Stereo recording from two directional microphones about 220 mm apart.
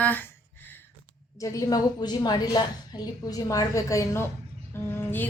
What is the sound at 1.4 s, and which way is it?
A woman's voice, 15° left (ahead or behind).